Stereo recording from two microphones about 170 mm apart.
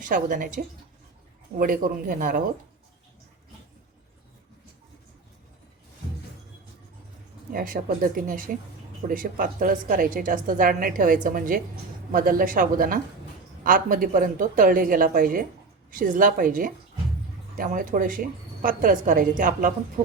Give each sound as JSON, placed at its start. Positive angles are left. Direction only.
{"t": 0.0, "sound": "a woman's voice", "side_deg": -50}
{"t": 7.5, "sound": "a woman's voice", "side_deg": -55}